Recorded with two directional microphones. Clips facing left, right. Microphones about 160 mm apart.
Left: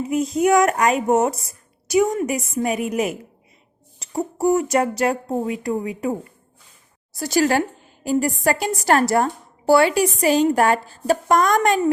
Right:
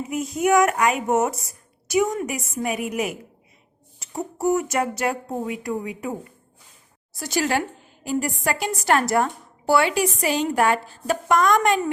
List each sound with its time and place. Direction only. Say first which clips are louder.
0.4 s a woman's voice: left 1 dB; 35° left (ahead or behind)
7.1 s a woman's voice: left 5 dB; 40° left (ahead or behind)